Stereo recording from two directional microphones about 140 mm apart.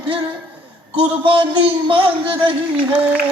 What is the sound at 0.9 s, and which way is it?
A man's voice, 40° right (ahead or behind).